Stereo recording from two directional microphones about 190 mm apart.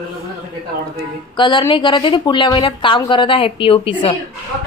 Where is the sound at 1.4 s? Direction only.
25° left (ahead or behind).